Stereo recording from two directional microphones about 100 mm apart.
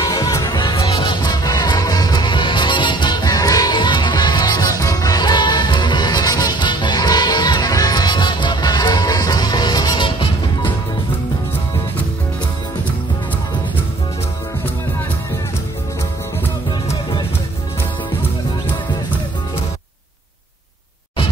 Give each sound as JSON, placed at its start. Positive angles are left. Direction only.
{"t": 0.0, "sound": "music", "side_deg": 35}
{"t": 0.6, "sound": "music", "side_deg": 55}